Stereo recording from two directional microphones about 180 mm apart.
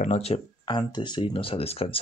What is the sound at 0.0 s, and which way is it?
Speech, 35° left (ahead or behind).